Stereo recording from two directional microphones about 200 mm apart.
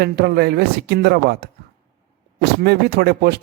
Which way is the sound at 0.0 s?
55° right (ahead or behind).